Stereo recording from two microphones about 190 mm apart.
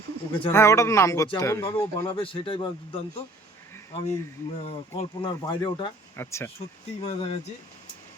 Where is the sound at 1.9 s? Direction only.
25° left (ahead or behind).